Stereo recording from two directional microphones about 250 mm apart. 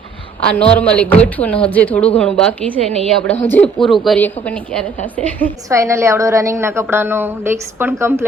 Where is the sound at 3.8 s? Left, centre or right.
Centre.